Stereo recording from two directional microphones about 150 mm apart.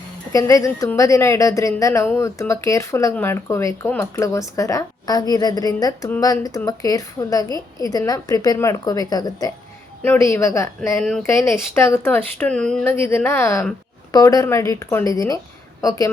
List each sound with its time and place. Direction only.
0.3 s speech: 25° left (ahead or behind); by 12.8 s 5° left (ahead or behind)
12.8 s speech: 15° left (ahead or behind)